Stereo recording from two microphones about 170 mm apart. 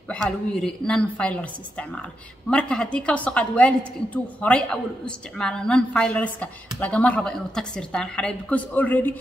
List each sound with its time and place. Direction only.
0.1 s a woman's voice: 5° left (ahead or behind)